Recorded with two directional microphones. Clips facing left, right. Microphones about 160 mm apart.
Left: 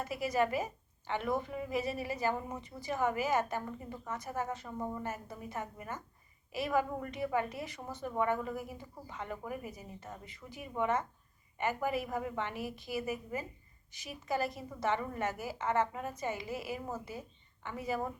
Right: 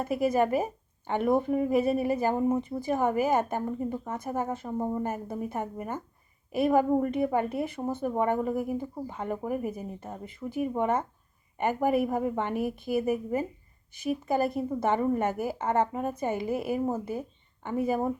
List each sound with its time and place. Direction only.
0.0 s speech: 50° right (ahead or behind)